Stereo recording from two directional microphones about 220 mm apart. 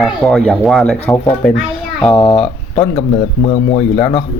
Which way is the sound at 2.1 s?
25° left (ahead or behind).